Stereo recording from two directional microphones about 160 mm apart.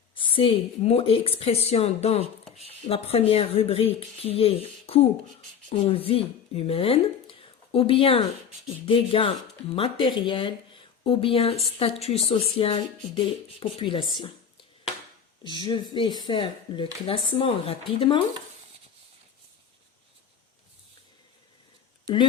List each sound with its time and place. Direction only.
0.1 s speech: 35° left (ahead or behind)
15.4 s speech: 25° left (ahead or behind)